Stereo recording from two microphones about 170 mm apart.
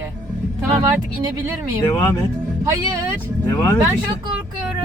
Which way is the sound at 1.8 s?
20° left (ahead or behind).